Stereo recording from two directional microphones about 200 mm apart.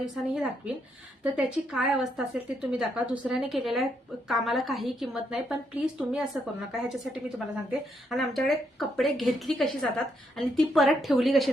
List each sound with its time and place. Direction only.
0.0 s a woman's voice: centre (ahead or behind)